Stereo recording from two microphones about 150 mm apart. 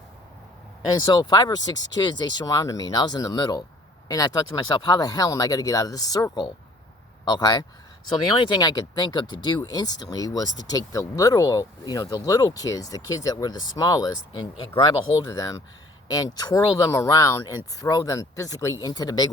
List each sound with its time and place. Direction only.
0.9 s speech: 25° left (ahead or behind)